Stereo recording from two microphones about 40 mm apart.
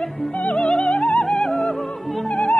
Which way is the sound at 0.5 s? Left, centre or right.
Centre.